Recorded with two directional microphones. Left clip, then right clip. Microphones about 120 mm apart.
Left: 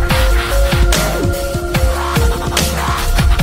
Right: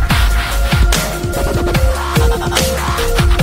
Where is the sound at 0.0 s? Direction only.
Centre (ahead or behind).